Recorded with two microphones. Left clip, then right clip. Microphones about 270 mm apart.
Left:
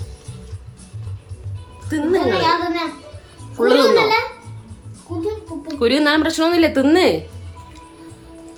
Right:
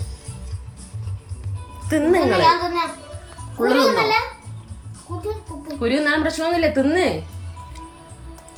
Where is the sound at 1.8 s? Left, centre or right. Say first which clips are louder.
Right 1 dB; centre.